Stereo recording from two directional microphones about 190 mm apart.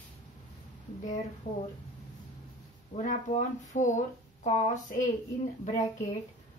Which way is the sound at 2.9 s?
40° left (ahead or behind).